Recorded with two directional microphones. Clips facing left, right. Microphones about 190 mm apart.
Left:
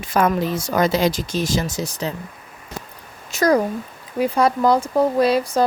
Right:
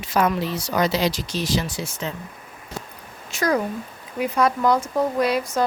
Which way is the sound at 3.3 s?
40° left (ahead or behind).